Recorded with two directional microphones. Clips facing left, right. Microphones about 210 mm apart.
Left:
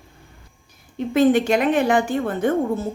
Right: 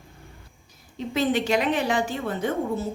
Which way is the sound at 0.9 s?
50° left (ahead or behind).